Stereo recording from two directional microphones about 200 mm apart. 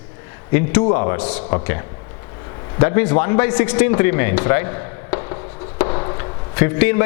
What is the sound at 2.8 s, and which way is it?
A man's voice, 15° left (ahead or behind).